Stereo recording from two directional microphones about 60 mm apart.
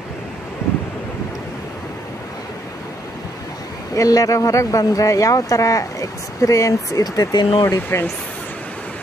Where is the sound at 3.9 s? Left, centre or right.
Left.